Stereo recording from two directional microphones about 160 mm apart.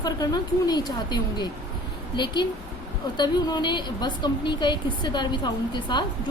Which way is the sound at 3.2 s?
25° left (ahead or behind).